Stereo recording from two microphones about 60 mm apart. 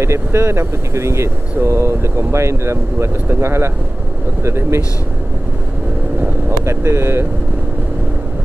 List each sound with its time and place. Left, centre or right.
0.0 s speech: right
6.2 s vehicle: right